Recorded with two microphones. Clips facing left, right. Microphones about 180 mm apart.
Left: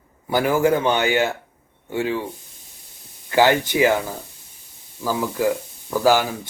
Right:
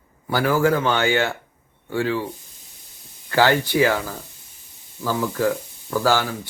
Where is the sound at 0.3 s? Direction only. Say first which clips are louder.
Left 1 dB; 20° left (ahead or behind).